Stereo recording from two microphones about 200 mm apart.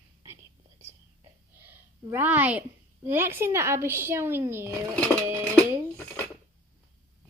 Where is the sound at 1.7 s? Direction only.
10° right (ahead or behind).